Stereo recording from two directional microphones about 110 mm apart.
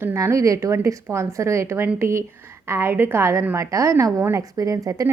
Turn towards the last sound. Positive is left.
turn(degrees=-30)  # may be behind; listen again after turning